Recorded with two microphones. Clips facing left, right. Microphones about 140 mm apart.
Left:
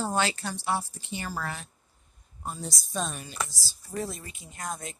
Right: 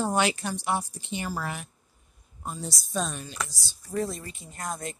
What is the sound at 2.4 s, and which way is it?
Speech, centre (ahead or behind).